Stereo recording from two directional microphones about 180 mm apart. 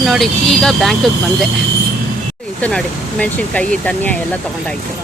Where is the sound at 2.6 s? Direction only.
5° left (ahead or behind).